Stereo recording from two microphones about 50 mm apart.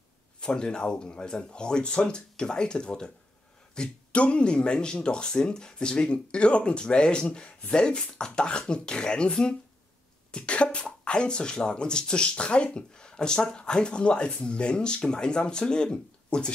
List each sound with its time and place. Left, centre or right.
0.4 s speech: centre